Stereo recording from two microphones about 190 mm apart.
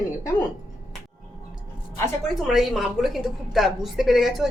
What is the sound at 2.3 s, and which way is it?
A woman's voice, centre (ahead or behind).